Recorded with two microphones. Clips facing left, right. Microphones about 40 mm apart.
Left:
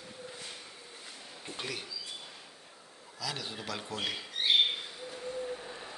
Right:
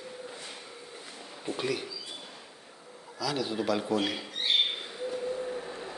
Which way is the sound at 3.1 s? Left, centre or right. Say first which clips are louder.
Right 7 dB; centre.